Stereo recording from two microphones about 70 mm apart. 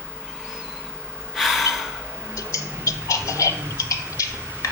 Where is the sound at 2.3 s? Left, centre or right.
Left.